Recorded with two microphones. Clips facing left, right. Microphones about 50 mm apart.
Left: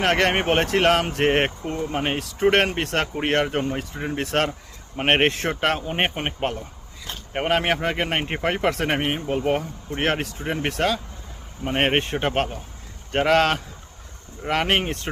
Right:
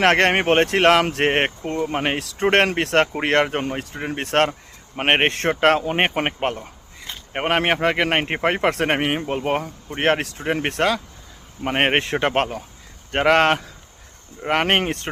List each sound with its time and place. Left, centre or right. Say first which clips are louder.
0.0 s speech: right 4 dB; right
1.3 s speech: right 1 dB; right
4.9 s speech: right 1 dB; right
5.3 s speech: right 6 dB; right
6.2 s speech: right 5 dB; right
7.4 s speech: right 3 dB; right
10.2 s speech: right 3 dB; right
11.9 s speech: right 3 dB; right
13.1 s speech: right 2 dB; right